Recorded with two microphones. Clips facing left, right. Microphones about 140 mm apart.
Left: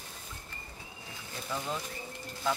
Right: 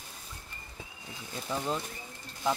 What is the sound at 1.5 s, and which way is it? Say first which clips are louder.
Speech: right 2 dB; 25° right (ahead or behind).